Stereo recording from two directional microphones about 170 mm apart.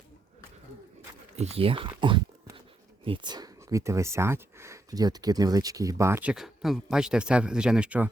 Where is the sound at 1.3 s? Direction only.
40° right (ahead or behind).